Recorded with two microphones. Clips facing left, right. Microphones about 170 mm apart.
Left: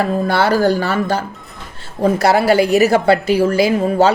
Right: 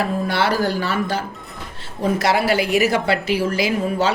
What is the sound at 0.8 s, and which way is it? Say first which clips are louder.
Speech: left 4 dB; 45° left (ahead or behind).